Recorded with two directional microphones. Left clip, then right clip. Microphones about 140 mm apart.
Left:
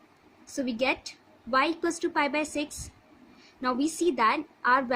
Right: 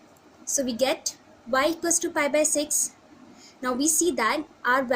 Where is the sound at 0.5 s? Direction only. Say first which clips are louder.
Right 3 dB; 60° left (ahead or behind).